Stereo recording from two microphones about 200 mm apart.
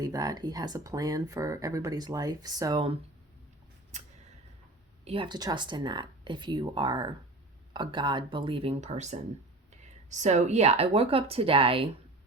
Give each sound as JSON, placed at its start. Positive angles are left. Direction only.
{"t": 0.0, "sound": "speech", "side_deg": -20}
{"t": 3.9, "sound": "a sound", "side_deg": -35}
{"t": 5.0, "sound": "speech", "side_deg": -25}